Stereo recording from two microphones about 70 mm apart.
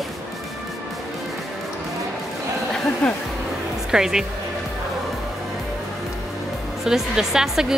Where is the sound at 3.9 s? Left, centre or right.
Centre.